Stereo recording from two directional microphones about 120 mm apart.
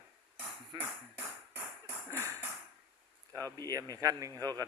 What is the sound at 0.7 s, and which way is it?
Speech, 40° right (ahead or behind).